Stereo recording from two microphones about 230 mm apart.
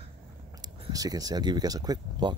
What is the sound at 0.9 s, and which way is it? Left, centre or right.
Speech, centre.